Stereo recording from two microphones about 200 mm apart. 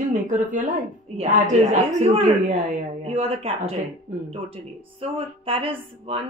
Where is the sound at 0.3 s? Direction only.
40° right (ahead or behind).